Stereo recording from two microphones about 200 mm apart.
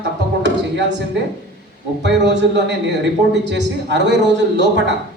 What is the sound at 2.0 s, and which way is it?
A woman's voice, 60° right (ahead or behind).